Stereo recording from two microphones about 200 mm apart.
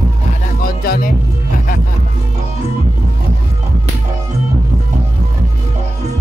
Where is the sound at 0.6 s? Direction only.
45° left (ahead or behind).